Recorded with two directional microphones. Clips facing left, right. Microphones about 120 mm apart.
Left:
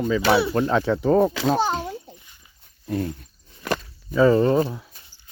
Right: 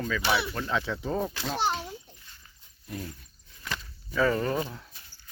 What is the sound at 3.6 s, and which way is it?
Walk, 55° left (ahead or behind).